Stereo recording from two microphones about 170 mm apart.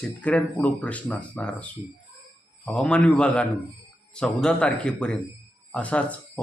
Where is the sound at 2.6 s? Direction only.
5° left (ahead or behind).